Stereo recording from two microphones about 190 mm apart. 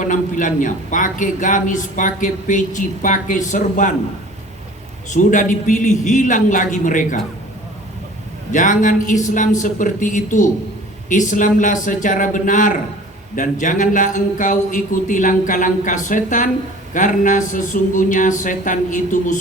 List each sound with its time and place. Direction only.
0.0 s a man's voice: 45° left (ahead or behind)
5.0 s a man's voice: 40° left (ahead or behind)
8.5 s a man's voice: 40° left (ahead or behind)